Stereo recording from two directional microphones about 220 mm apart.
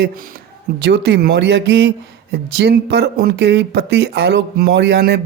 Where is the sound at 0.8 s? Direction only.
50° right (ahead or behind).